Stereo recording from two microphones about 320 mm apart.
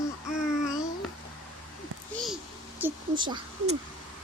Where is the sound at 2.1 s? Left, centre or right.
Centre.